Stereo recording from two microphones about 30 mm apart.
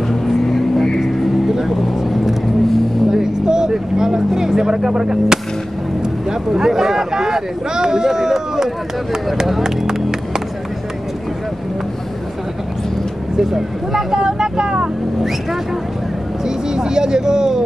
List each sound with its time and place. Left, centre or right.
0.1 s vehicle: centre
0.9 s vehicle: centre
2.0 s vehicle: centre
3.1 s vehicle: right
6.0 s speech: centre
13.4 s speech: centre
14.1 s speech: right
16.4 s speech: right